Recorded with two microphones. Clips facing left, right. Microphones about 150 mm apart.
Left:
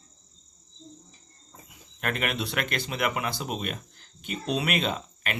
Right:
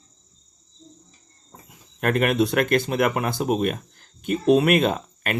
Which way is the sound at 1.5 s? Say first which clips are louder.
Right 4 dB; 45° right (ahead or behind).